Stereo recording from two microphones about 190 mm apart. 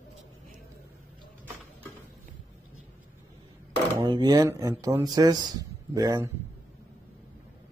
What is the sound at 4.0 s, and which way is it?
Speech, 20° right (ahead or behind).